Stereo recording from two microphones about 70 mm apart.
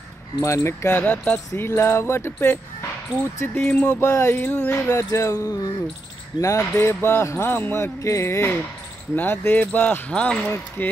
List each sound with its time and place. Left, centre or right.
0.4 s speech: left
0.9 s speech: left
1.6 s speech: left; by 10.5 s centre
10.8 s speech: left